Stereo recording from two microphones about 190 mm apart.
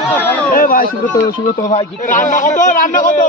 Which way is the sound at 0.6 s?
45° left (ahead or behind).